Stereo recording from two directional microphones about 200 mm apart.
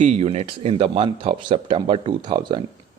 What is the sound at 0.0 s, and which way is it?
A man's voice, 35° right (ahead or behind).